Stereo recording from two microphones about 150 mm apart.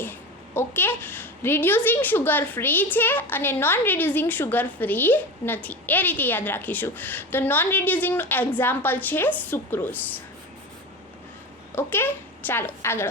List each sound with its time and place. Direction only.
0.0 s a child's voice: 15° left (ahead or behind)
11.7 s a woman's voice: 15° left (ahead or behind)